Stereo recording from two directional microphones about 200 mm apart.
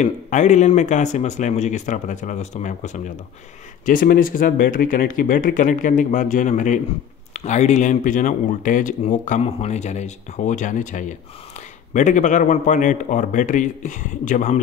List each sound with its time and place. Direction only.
0.0 s speech: 35° left (ahead or behind)